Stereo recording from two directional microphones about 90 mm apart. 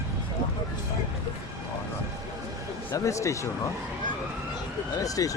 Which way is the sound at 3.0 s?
35° left (ahead or behind).